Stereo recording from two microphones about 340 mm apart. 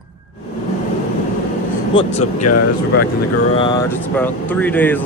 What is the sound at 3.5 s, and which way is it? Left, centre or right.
Speech, centre.